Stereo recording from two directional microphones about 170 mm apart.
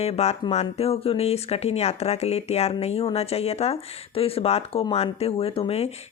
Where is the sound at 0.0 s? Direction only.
40° left (ahead or behind).